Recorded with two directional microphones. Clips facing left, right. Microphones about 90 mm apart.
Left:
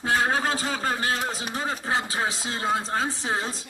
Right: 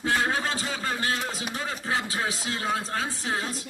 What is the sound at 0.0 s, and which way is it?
A man's voice, 40° left (ahead or behind).